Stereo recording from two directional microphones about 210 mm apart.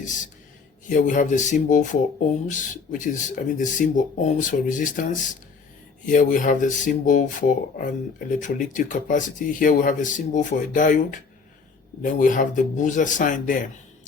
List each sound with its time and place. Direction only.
0.0 s speech: 35° left (ahead or behind)
6.1 s speech: 40° left (ahead or behind)